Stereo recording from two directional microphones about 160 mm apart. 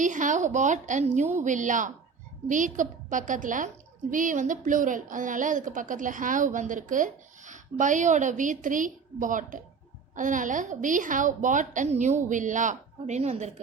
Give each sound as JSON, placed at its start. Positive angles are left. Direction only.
{"t": 0.0, "sound": "a woman's voice", "side_deg": -50}